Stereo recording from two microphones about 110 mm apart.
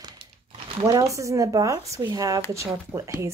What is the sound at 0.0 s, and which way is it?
Crumpling, 45° right (ahead or behind).